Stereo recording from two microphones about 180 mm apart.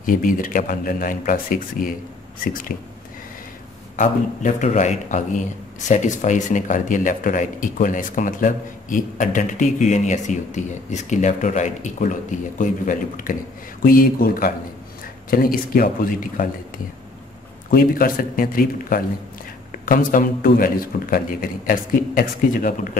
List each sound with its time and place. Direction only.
0.0 s a man's voice: 50° left (ahead or behind)
3.9 s a man's voice: 45° left (ahead or behind)